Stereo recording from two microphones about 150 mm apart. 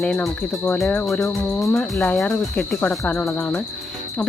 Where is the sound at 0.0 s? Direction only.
5° left (ahead or behind).